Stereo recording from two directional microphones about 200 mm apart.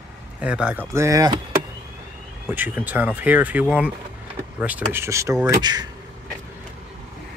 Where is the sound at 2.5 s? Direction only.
10° right (ahead or behind).